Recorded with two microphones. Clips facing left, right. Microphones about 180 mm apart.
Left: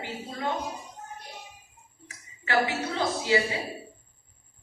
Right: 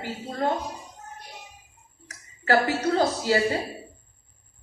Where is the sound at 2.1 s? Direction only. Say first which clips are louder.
Right 8 dB; 40° right (ahead or behind).